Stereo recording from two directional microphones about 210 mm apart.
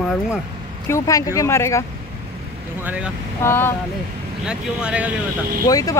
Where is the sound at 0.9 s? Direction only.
15° left (ahead or behind).